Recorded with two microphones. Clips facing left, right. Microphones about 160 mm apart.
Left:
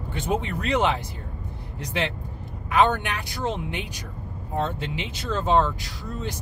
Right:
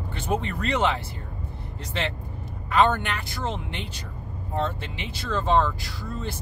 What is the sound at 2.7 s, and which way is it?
Speech, 15° left (ahead or behind).